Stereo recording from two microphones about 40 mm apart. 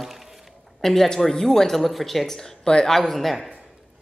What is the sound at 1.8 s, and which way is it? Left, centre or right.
Speech, centre.